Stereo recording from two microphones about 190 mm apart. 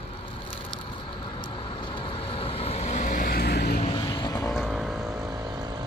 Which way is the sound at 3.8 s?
25° left (ahead or behind).